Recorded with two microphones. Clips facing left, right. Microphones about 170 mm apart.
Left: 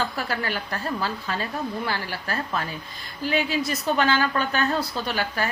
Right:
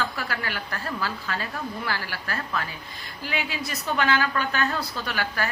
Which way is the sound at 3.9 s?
30° left (ahead or behind).